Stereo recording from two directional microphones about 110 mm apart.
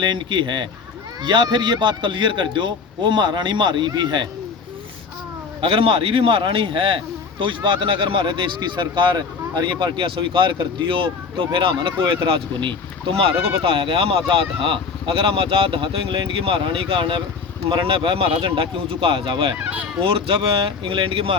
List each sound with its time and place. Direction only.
0.0 s speech: 45° right (ahead or behind)
5.5 s speech: 55° right (ahead or behind)
19.5 s fowl: 15° right (ahead or behind)
20.0 s speech: 50° right (ahead or behind)